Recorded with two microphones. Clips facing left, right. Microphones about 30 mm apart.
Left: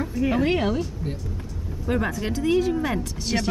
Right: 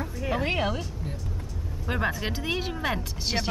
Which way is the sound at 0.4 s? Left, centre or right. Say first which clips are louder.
Left 4 dB; centre.